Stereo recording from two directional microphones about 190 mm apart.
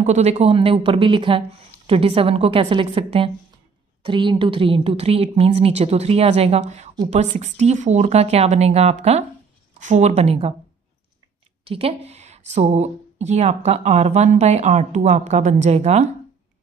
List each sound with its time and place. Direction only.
0.0 s a woman's voice: 35° right (ahead or behind)
11.6 s a woman's voice: 30° right (ahead or behind)